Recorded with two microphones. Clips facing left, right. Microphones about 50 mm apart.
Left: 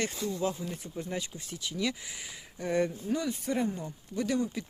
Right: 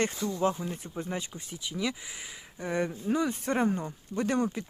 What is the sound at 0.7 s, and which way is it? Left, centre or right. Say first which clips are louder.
Speech: right 1 dB; centre.